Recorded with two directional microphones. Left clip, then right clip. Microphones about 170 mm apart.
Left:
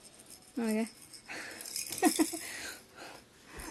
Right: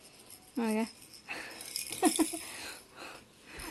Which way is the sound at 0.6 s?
5° left (ahead or behind).